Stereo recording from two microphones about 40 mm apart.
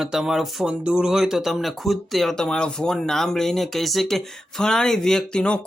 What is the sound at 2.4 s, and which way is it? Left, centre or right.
Speech, left.